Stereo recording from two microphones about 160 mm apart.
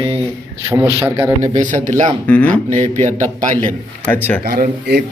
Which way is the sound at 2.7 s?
50° right (ahead or behind).